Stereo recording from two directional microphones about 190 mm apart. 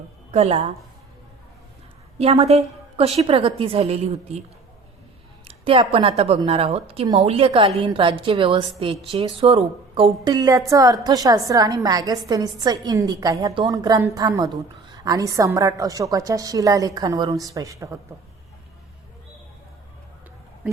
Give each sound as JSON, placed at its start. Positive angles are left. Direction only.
{"t": 0.3, "sound": "a woman's voice", "side_deg": -35}
{"t": 2.1, "sound": "a woman's voice", "side_deg": -30}
{"t": 5.5, "sound": "a woman's voice", "side_deg": -30}